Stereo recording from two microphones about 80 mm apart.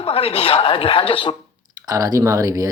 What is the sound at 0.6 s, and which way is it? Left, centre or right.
Speech, left.